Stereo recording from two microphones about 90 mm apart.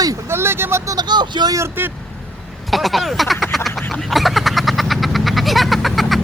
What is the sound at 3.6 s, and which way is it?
Vehicle, centre (ahead or behind).